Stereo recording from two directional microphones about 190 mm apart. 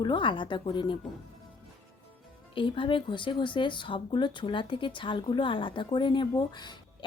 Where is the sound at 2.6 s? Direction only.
25° left (ahead or behind).